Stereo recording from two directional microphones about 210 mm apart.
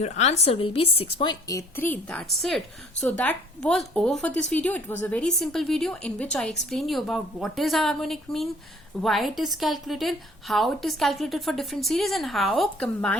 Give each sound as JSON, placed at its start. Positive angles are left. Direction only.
{"t": 0.0, "sound": "a woman's voice", "side_deg": 30}